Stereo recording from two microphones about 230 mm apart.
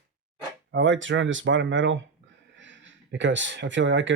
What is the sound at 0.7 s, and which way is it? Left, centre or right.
Speech, right.